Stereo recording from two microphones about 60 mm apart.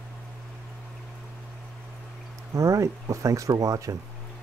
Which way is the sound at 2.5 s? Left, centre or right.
Right.